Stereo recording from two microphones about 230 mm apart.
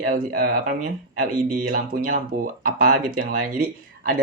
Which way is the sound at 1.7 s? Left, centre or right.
Right.